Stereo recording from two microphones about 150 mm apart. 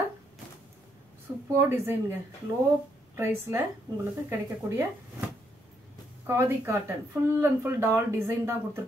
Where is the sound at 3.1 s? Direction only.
15° right (ahead or behind).